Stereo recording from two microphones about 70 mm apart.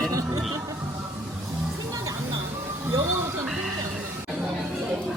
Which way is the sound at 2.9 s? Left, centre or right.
Right.